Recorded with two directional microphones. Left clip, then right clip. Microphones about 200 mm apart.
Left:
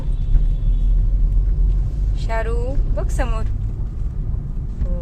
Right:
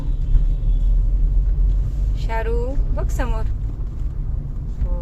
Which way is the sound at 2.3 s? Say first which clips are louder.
Even; 5° left (ahead or behind).